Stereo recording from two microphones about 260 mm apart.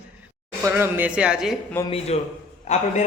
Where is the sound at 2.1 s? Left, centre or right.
Left.